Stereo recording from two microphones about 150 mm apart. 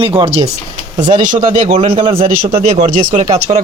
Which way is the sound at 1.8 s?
40° right (ahead or behind).